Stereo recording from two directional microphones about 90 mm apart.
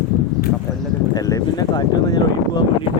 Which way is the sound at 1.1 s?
45° left (ahead or behind).